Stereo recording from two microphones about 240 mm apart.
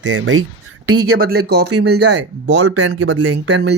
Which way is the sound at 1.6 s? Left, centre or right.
Right.